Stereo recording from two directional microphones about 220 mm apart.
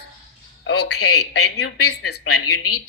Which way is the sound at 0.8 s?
85° left.